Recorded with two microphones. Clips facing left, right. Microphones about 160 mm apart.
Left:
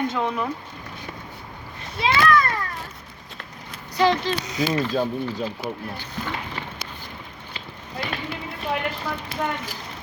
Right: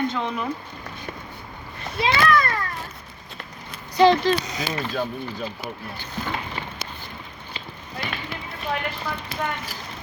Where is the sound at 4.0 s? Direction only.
20° right (ahead or behind).